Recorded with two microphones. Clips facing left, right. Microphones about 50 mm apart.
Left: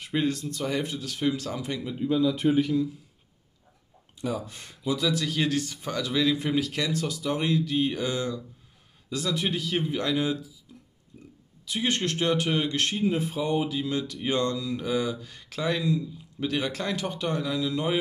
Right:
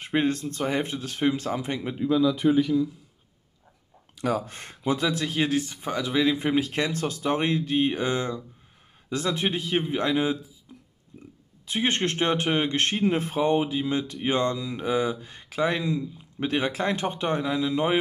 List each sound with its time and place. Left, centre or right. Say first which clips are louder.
0.0 s speech: right 3 dB; right
4.1 s speech: right 4 dB; right
4.5 s speech: right 3 dB; right
11.1 s speech: right 3 dB; centre
11.6 s speech: right 2 dB; right
12.9 s speech: right 2 dB; right